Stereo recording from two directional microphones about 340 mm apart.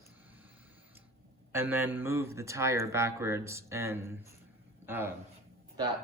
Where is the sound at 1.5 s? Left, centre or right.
Centre.